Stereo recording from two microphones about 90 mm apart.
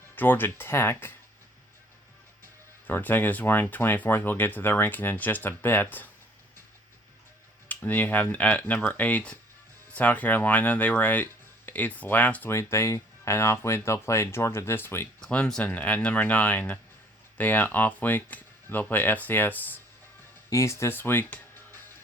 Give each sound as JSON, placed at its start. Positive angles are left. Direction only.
{"t": 0.2, "sound": "speech", "side_deg": 20}
{"t": 2.8, "sound": "speech", "side_deg": 20}
{"t": 7.7, "sound": "speech", "side_deg": 20}
{"t": 15.2, "sound": "speech", "side_deg": 10}
{"t": 20.5, "sound": "speech", "side_deg": 30}